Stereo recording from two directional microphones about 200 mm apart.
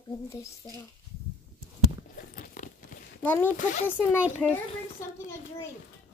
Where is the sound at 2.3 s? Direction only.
40° left (ahead or behind).